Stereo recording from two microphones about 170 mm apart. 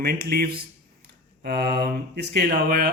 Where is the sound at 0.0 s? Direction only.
65° right (ahead or behind).